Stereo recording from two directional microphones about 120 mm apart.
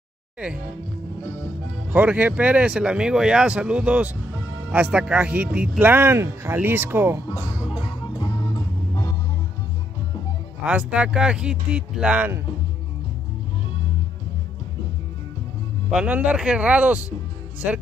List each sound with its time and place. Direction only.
1.9 s speech: 10° right (ahead or behind)
8.1 s music: 35° left (ahead or behind)
10.6 s speech: 10° right (ahead or behind)
15.9 s speech: 10° right (ahead or behind)